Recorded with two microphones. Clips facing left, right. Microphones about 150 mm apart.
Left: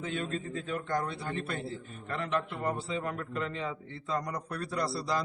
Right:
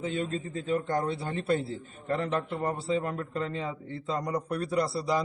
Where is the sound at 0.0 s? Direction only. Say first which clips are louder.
Right 3 dB; 25° right (ahead or behind).